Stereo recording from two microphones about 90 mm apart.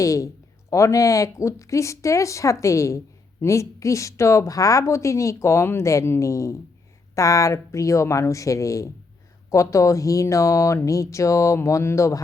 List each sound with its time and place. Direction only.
0.0 s a woman's voice: 40° left (ahead or behind)